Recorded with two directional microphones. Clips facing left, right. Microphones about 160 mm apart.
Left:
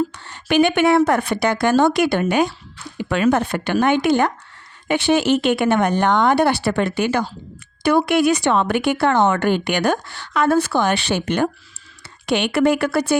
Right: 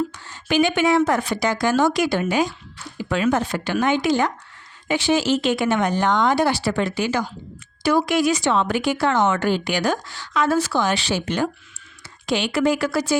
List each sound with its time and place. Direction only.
0.3 s speech: 65° left (ahead or behind)